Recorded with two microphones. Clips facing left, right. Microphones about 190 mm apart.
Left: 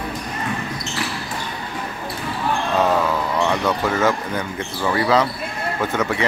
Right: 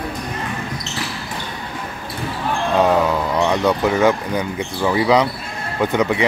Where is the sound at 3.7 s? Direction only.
15° right (ahead or behind).